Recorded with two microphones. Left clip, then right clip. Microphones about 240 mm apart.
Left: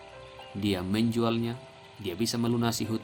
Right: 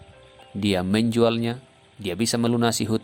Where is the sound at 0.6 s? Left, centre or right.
Right.